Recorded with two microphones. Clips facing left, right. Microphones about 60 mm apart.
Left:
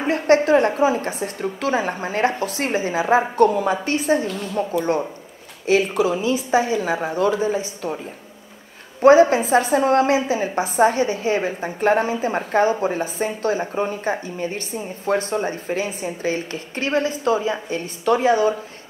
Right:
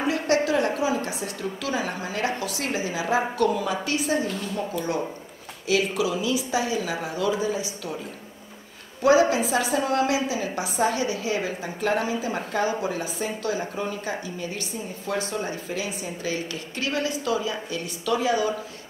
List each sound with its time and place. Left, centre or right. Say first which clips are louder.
0.0 s a woman's voice: left 6 dB; left
5.7 s a woman's voice: left 5 dB; left
9.0 s a woman's voice: left 6 dB; left